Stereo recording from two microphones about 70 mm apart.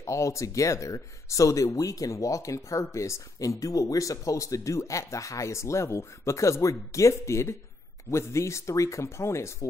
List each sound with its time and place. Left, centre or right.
0.0 s speech: left